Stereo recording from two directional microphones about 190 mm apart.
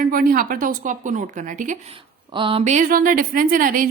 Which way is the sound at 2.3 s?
30° right (ahead or behind).